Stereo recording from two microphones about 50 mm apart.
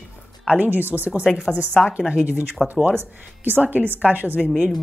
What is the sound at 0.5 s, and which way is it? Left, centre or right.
Speech, right.